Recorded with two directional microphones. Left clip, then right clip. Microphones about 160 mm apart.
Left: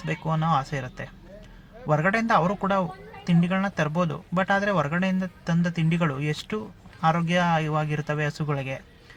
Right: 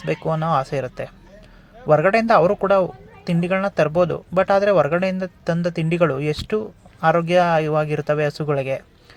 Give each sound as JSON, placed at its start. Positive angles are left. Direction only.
{"t": 0.0, "sound": "speech", "side_deg": -25}